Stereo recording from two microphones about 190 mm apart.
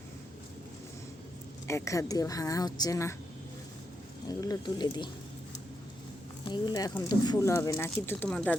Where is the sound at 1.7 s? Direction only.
15° left (ahead or behind).